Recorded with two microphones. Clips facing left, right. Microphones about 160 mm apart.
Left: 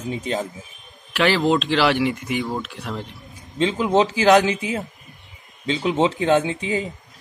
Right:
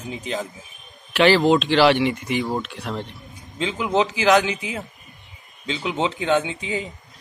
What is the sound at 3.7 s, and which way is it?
A man's voice, 35° left (ahead or behind).